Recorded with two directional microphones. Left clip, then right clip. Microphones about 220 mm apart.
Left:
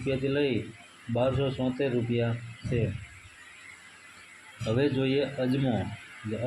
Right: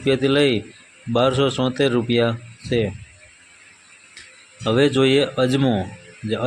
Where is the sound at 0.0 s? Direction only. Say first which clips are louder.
Right 11 dB; 35° right (ahead or behind).